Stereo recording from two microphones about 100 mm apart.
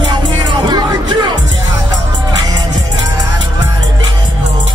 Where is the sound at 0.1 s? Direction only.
45° right (ahead or behind).